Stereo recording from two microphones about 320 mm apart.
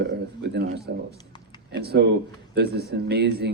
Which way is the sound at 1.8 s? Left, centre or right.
Right.